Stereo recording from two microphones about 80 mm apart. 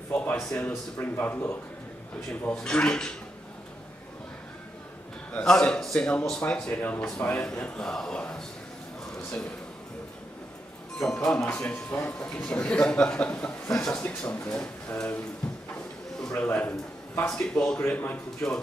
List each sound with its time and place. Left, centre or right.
0.1 s a sound: left
0.4 s speech: centre
2.5 s speech: centre
5.3 s speech: centre
11.2 s speech: centre
15.4 s a sound: centre
16.5 s a man's voice: left
17.3 s speech: centre
17.7 s speech: left